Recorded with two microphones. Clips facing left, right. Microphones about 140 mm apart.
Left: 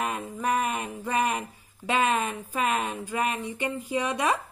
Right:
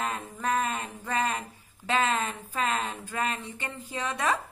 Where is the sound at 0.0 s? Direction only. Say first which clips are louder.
Left 2 dB; 15° left (ahead or behind).